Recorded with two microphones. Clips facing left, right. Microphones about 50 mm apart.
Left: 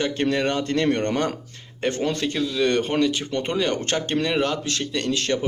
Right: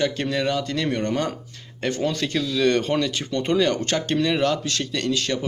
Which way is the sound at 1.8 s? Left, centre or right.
Left.